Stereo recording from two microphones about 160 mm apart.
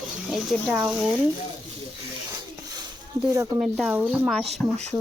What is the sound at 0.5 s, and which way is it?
Speech, centre (ahead or behind).